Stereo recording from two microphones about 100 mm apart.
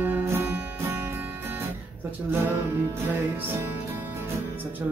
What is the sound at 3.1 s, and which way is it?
Music, 20° right (ahead or behind).